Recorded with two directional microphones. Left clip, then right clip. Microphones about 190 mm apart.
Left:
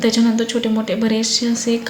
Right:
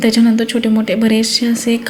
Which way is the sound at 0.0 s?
15° right (ahead or behind).